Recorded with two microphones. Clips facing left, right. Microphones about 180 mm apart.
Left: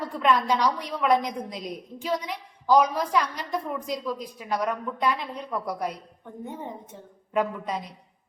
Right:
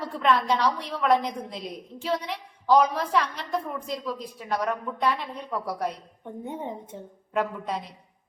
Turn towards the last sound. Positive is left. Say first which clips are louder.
# left 1 dB
turn(degrees=0)  # may be behind; listen again after turning